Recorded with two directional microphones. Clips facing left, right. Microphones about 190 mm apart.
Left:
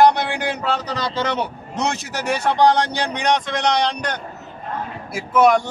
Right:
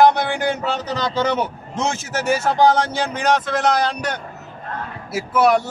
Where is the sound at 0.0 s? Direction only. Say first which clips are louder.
Right 1 dB; centre (ahead or behind).